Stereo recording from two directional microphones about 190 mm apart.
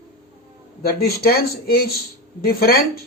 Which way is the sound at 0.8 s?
55° left (ahead or behind).